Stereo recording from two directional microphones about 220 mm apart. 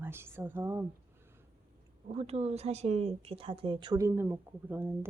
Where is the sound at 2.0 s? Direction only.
30° right (ahead or behind).